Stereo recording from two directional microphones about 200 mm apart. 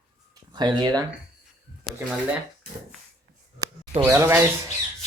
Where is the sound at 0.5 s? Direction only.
20° right (ahead or behind).